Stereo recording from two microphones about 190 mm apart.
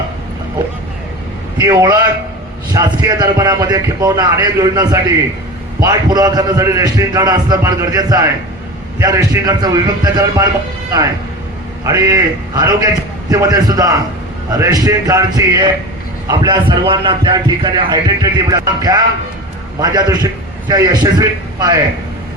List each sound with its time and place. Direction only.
1.5 s a man's voice: 20° right (ahead or behind)
11.9 s a man's voice: 15° right (ahead or behind)